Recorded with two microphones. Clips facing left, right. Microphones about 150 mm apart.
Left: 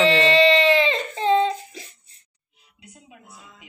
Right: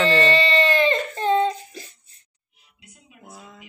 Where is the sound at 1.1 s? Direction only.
20° left (ahead or behind).